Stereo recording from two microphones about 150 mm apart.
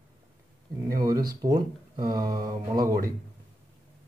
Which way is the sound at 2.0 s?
70° right (ahead or behind).